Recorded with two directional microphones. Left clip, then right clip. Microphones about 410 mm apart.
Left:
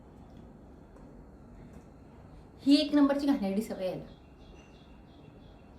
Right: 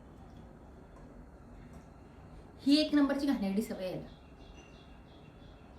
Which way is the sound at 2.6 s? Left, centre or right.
Centre.